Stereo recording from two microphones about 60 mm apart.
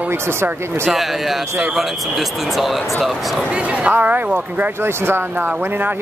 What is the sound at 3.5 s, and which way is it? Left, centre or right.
Speech, centre.